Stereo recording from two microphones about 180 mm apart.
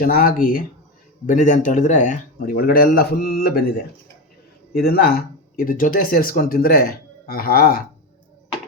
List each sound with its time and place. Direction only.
0.0 s speech: 50° left (ahead or behind)
4.7 s speech: 60° left (ahead or behind)